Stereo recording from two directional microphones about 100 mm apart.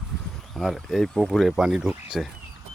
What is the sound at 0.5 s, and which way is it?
Speech, centre (ahead or behind).